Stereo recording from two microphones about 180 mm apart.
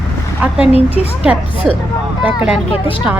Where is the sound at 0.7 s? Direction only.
35° left (ahead or behind).